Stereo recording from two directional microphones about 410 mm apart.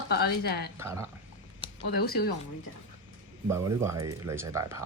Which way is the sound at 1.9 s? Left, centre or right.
Left.